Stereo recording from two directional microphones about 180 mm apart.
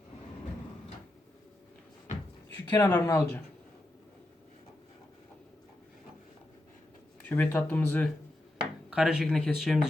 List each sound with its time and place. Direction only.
2.6 s speech: 20° left (ahead or behind)
7.2 s speech: 10° left (ahead or behind)
8.9 s speech: 5° right (ahead or behind)